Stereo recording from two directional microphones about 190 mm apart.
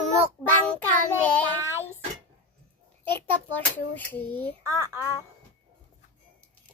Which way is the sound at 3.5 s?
10° left (ahead or behind).